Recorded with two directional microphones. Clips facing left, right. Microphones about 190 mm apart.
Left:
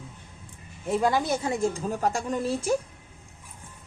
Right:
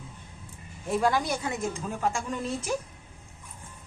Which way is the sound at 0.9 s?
20° left (ahead or behind).